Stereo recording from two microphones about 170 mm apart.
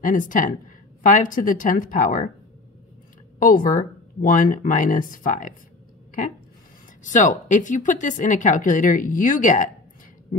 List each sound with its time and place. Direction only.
0.0 s a woman's voice: 50° left (ahead or behind)
3.3 s a woman's voice: 55° left (ahead or behind)
7.0 s a woman's voice: 50° left (ahead or behind)